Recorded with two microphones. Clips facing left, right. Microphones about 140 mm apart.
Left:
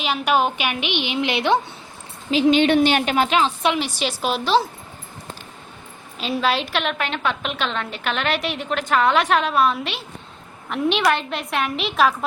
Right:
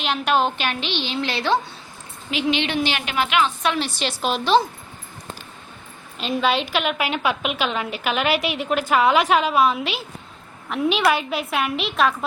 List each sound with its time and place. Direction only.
0.0 s a woman's voice: 10° left (ahead or behind)
2.3 s a woman's voice: 45° left (ahead or behind)
3.7 s a woman's voice: 10° left (ahead or behind)
6.1 s a woman's voice: centre (ahead or behind)